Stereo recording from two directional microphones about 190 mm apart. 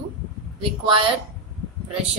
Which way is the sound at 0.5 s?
30° right (ahead or behind).